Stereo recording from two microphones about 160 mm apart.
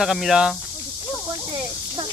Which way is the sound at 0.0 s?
Centre (ahead or behind).